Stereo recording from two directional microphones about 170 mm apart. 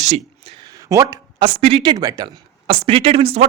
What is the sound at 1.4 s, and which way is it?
Speech, 35° right (ahead or behind).